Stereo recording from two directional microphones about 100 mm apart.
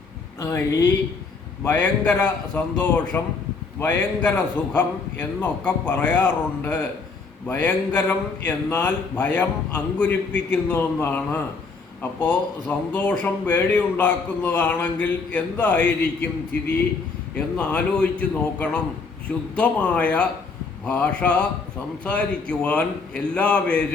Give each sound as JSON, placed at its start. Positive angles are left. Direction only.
{"t": 0.3, "sound": "a man's voice", "side_deg": 30}
{"t": 17.3, "sound": "a man's voice", "side_deg": 15}